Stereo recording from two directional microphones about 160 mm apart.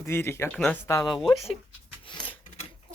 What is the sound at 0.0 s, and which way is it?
Speech, 15° left (ahead or behind).